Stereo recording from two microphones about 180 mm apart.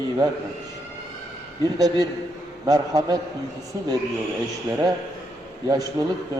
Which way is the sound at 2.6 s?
20° right (ahead or behind).